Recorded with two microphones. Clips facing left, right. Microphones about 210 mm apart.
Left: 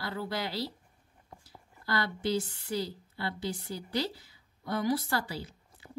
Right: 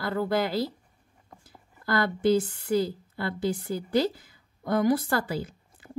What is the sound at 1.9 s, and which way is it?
A woman's voice, 50° right (ahead or behind).